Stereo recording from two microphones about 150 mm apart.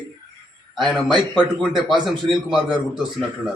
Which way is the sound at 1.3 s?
Centre (ahead or behind).